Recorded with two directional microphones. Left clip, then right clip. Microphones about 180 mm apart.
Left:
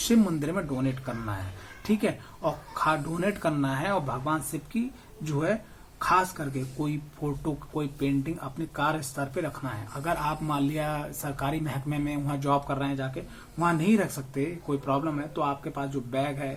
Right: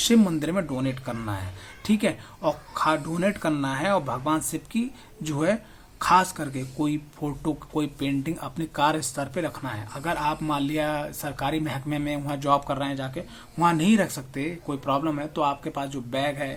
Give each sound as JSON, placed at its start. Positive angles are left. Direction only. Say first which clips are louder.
{"t": 0.1, "sound": "speech", "louder": "right 3 dB", "side_deg": -35}